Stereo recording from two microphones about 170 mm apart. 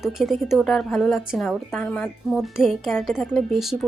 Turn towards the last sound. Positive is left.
turn(degrees=0)  # may be behind; listen again after turning